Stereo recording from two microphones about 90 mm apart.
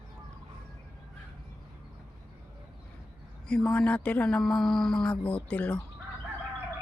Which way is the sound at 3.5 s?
10° left (ahead or behind).